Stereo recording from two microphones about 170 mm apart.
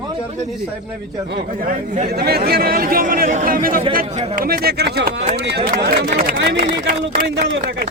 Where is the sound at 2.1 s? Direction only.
65° right (ahead or behind).